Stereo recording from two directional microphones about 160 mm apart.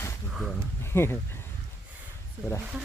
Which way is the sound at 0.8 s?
15° left (ahead or behind).